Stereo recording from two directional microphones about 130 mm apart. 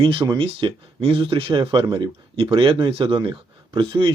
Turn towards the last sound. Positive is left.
turn(degrees=-40)  # may be behind; listen again after turning